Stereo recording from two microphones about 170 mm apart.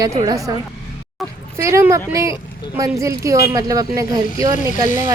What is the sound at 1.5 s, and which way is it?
A woman's voice, 15° right (ahead or behind).